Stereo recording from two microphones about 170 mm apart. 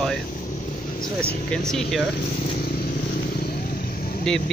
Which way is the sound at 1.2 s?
5° left (ahead or behind).